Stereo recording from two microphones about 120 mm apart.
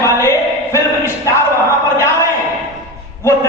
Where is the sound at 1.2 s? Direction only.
25° left (ahead or behind).